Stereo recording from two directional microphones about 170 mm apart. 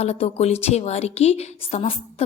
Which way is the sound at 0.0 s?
40° left (ahead or behind).